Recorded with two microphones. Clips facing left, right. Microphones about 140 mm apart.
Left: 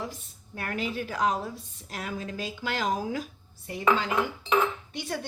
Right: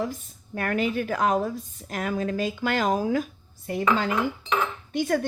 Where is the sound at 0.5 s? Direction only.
60° right (ahead or behind).